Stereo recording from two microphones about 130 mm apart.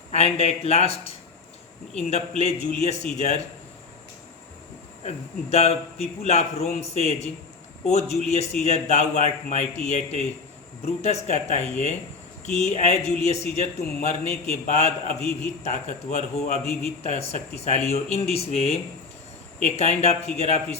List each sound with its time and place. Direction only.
0.1 s a man's voice: 50° left (ahead or behind)
5.0 s a man's voice: 55° left (ahead or behind)